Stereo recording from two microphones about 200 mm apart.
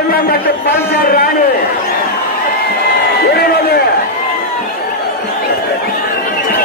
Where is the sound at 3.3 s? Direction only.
50° left (ahead or behind).